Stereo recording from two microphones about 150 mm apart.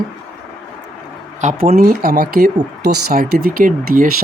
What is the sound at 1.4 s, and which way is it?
Speech, 70° right (ahead or behind).